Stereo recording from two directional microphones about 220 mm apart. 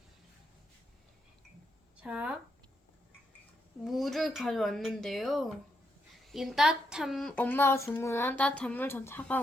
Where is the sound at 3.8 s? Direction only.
Centre (ahead or behind).